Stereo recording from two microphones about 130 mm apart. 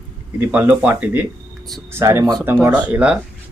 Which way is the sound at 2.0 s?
25° right (ahead or behind).